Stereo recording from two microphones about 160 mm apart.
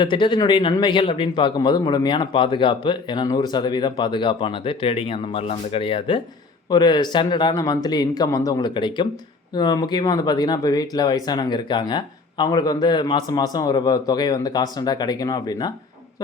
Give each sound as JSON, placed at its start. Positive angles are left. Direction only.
{"t": 0.0, "sound": "speech", "side_deg": 30}